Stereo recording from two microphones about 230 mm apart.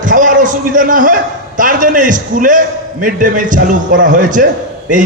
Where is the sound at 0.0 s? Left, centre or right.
Right.